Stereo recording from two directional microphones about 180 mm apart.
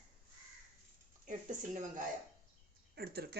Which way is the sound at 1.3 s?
45° right (ahead or behind).